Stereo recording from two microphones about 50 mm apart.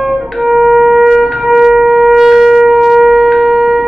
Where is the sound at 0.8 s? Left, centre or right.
Centre.